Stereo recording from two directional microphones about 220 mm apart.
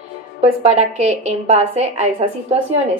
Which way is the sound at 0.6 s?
30° right (ahead or behind).